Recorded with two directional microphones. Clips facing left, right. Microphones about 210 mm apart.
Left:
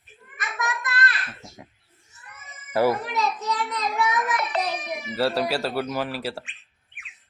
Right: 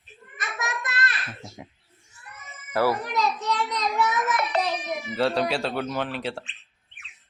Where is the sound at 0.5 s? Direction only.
20° right (ahead or behind).